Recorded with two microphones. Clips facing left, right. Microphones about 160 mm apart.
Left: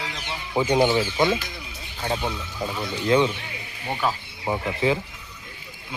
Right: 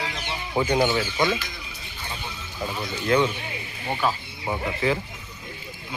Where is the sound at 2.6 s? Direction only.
20° left (ahead or behind).